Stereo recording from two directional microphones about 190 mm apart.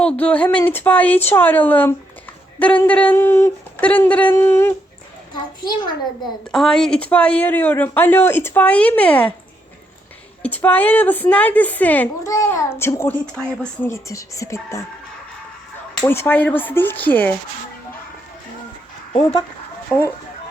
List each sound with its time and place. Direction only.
0.0 s speech: 5° left (ahead or behind)
6.5 s speech: centre (ahead or behind)
10.4 s speech: 10° left (ahead or behind)
13.9 s speech: 15° left (ahead or behind)
16.0 s speech: 10° left (ahead or behind)
19.1 s speech: 25° left (ahead or behind)
19.9 s speech: 5° left (ahead or behind)